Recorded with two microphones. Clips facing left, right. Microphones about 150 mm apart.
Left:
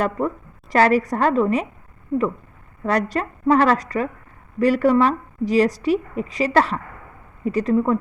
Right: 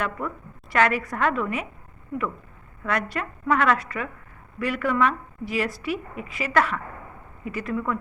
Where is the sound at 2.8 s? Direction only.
35° left (ahead or behind).